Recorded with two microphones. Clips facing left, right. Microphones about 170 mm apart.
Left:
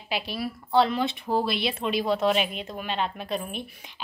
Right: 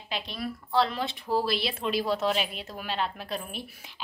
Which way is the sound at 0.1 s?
5° left (ahead or behind).